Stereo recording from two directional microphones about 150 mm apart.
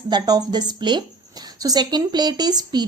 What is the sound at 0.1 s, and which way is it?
A woman's voice, 25° right (ahead or behind).